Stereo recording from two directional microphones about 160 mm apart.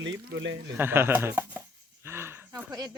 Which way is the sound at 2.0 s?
15° right (ahead or behind).